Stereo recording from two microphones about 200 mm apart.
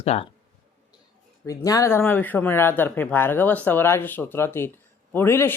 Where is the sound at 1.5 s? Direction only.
15° left (ahead or behind).